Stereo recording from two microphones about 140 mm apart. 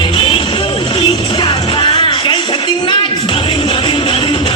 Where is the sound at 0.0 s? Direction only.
35° left (ahead or behind).